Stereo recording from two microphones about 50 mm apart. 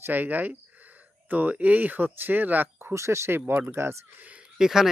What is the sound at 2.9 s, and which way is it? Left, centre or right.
Speech, right.